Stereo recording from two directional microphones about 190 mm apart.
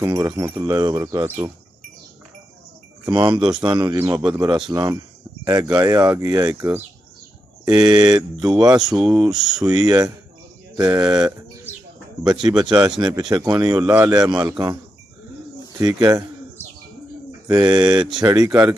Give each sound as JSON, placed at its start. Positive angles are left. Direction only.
{"t": 0.0, "sound": "speech", "side_deg": -15}
{"t": 3.1, "sound": "a man's voice", "side_deg": -25}
{"t": 9.0, "sound": "speech", "side_deg": -5}
{"t": 9.8, "sound": "a man's voice", "side_deg": -20}
{"t": 15.8, "sound": "a man's voice", "side_deg": -20}
{"t": 17.6, "sound": "a man's voice", "side_deg": -20}